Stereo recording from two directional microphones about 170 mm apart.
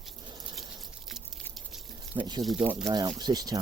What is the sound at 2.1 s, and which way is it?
Speech, 25° right (ahead or behind).